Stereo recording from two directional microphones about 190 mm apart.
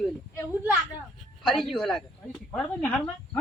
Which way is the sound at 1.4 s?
Centre (ahead or behind).